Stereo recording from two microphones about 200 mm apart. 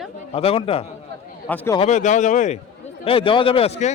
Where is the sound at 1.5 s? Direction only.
10° left (ahead or behind).